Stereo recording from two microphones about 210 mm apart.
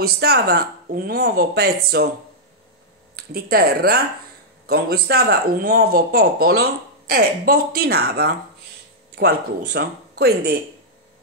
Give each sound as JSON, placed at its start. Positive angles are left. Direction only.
{"t": 0.0, "sound": "speech", "side_deg": -50}
{"t": 3.2, "sound": "speech", "side_deg": -45}